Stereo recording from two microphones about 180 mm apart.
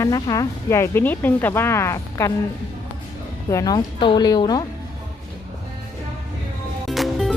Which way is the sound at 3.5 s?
20° left (ahead or behind).